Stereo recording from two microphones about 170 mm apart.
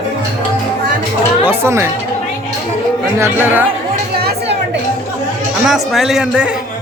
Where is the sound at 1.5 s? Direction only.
15° right (ahead or behind).